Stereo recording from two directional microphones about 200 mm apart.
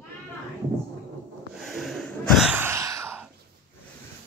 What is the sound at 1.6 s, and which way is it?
Sigh, centre (ahead or behind).